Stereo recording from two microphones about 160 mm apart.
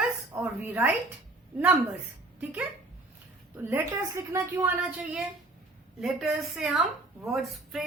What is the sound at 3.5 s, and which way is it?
A woman's voice, 15° right (ahead or behind).